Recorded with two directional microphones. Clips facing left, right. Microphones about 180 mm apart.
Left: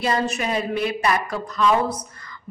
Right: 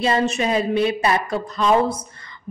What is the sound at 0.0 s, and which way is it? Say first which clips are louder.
A man's voice: right 3 dB; 25° right (ahead or behind).